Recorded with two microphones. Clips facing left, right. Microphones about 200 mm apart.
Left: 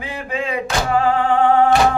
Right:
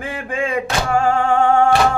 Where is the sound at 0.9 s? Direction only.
45° right (ahead or behind).